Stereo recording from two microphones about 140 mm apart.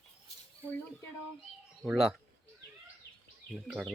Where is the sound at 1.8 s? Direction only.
5° right (ahead or behind).